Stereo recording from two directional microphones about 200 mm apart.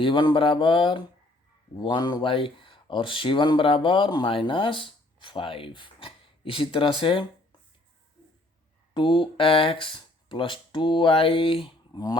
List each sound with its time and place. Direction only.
0.0 s speech: 25° left (ahead or behind)
8.9 s speech: 25° left (ahead or behind)